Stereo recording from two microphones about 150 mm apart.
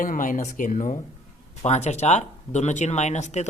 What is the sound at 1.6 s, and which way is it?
Speech, 45° left (ahead or behind).